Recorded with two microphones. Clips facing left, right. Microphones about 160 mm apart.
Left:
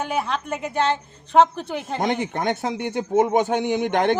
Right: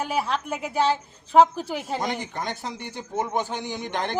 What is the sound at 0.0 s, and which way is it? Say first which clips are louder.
A woman's voice: left 1 dB; centre (ahead or behind).